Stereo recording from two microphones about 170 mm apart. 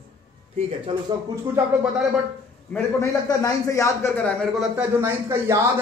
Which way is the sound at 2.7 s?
15° left (ahead or behind).